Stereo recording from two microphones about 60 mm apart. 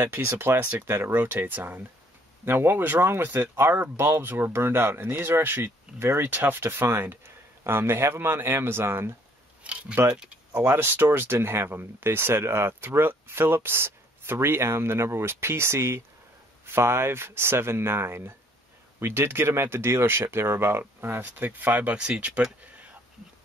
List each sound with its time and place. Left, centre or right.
0.0 s speech: right
9.6 s a sound: right
10.1 s speech: centre
10.5 s speech: right